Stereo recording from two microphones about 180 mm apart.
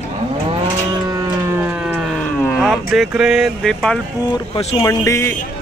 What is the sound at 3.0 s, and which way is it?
Speech, 5° right (ahead or behind).